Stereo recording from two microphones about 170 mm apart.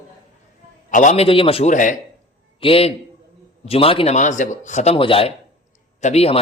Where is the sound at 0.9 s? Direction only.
45° left (ahead or behind).